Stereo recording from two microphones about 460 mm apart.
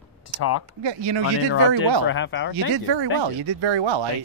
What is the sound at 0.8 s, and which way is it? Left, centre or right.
Speech, right.